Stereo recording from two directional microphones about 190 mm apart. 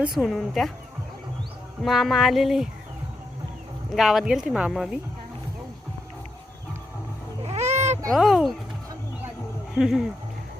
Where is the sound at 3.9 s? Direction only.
Centre (ahead or behind).